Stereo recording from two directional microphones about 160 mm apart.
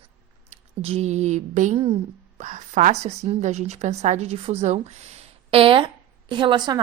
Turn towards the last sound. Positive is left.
turn(degrees=-30)  # may be behind; listen again after turning